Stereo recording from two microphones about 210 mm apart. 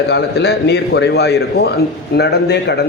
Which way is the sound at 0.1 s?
55° left (ahead or behind).